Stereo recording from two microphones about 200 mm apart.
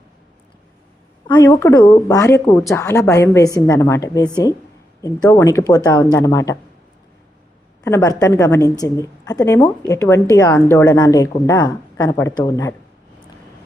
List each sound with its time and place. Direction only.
1.3 s a woman's voice: 15° left (ahead or behind)
7.9 s a woman's voice: 15° left (ahead or behind)